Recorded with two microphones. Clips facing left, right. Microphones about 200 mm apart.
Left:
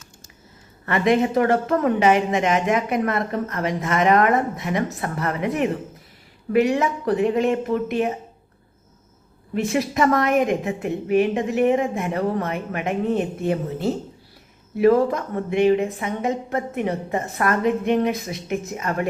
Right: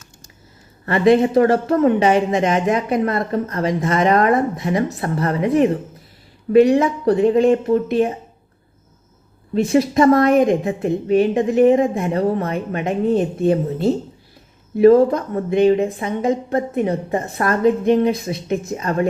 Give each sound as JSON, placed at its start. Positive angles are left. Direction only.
{"t": 0.9, "sound": "speech", "side_deg": -35}
{"t": 9.7, "sound": "speech", "side_deg": -35}
{"t": 14.8, "sound": "speech", "side_deg": -35}